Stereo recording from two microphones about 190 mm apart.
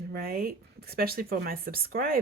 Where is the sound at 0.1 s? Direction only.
50° right (ahead or behind).